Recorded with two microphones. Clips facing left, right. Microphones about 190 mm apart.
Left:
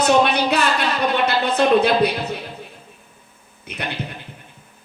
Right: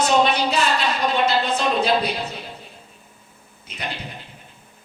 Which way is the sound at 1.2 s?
60° left (ahead or behind).